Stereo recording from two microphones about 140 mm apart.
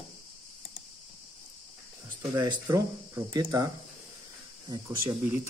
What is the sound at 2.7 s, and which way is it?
Speech, 25° right (ahead or behind).